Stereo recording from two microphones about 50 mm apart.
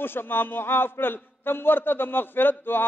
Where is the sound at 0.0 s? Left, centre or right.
Left.